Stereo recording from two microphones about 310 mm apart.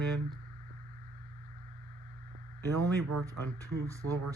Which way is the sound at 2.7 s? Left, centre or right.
Right.